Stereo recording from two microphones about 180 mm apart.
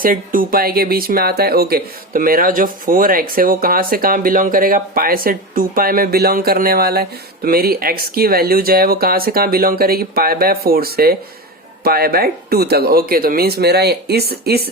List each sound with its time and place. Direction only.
0.0 s speech: 50° right (ahead or behind)